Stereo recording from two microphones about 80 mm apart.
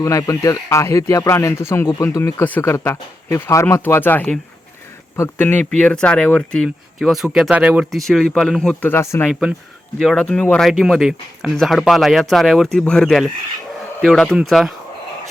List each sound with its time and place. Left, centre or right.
0.0 s speech: left; by 4.4 s centre
5.4 s speech: left
7.0 s speech: centre
7.5 s speech: centre
7.9 s speech: centre
8.8 s speech: left
9.3 s speech: centre
10.0 s speech: centre